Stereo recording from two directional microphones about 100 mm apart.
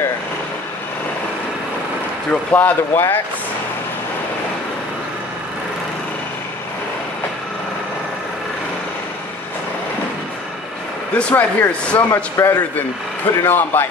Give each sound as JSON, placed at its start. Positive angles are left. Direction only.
{"t": 2.5, "sound": "speech", "side_deg": 20}
{"t": 11.1, "sound": "speech", "side_deg": 15}